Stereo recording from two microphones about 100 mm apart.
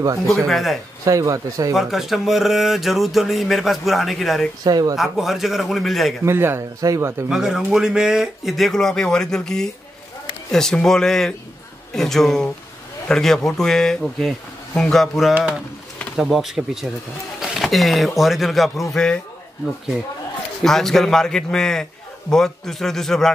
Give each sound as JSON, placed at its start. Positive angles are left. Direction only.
{"t": 0.3, "sound": "speech", "side_deg": 0}
{"t": 1.0, "sound": "speech", "side_deg": -35}
{"t": 1.7, "sound": "speech", "side_deg": 0}
{"t": 4.6, "sound": "speech", "side_deg": -40}
{"t": 4.9, "sound": "speech", "side_deg": 0}
{"t": 6.2, "sound": "speech", "side_deg": -25}
{"t": 7.2, "sound": "speech", "side_deg": -5}
{"t": 20.6, "sound": "speech", "side_deg": 5}